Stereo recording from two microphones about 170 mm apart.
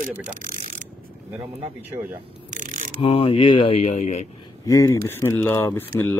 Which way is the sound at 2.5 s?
50° right (ahead or behind).